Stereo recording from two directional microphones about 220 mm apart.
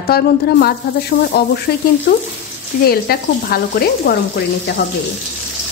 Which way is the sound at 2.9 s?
45° left (ahead or behind).